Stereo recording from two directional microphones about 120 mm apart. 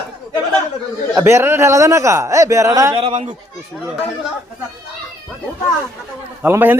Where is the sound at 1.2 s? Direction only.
25° right (ahead or behind).